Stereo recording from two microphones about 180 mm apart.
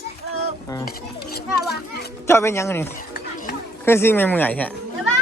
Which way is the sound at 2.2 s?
15° left (ahead or behind).